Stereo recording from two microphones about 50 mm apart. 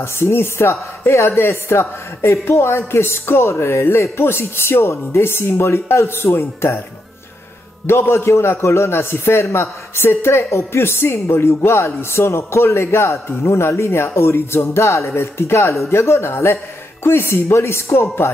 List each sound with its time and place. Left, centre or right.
0.0 s speech: left
3.5 s speech: left
7.8 s a man's voice: left
15.0 s speech: left